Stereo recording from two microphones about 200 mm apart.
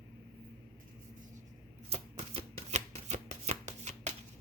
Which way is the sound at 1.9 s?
30° right (ahead or behind).